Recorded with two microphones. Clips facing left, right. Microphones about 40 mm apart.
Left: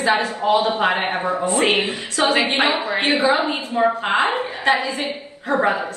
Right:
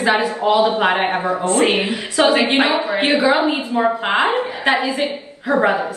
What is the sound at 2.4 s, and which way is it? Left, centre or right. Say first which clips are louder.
Speech: right 3 dB; right.